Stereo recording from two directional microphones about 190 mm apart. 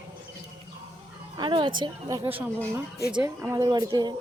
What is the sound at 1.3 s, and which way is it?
A woman's voice, 25° right (ahead or behind).